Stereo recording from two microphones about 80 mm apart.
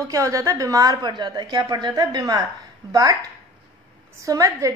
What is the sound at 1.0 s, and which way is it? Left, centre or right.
A woman's voice, right.